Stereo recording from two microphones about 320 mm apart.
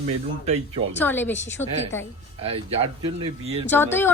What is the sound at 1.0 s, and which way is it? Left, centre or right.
Speech, centre.